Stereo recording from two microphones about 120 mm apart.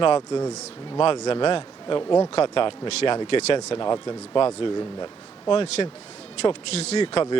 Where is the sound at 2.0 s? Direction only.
25° left (ahead or behind).